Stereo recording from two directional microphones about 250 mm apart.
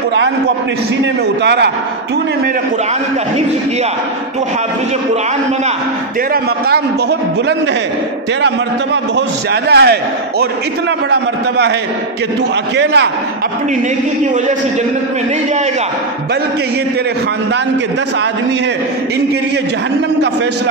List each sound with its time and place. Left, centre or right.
1.4 s a man's voice: right
6.3 s a man's voice: right
9.5 s a man's voice: right
11.1 s a man's voice: right
12.7 s a man's voice: right